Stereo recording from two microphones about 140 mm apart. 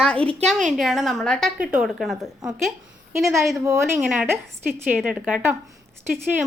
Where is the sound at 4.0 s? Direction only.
5° right (ahead or behind).